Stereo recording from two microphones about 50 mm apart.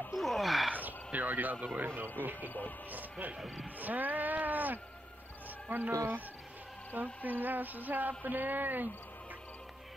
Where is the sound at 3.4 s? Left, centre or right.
Centre.